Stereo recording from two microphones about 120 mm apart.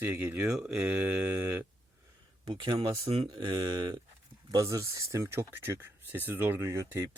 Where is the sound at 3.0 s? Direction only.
50° right (ahead or behind).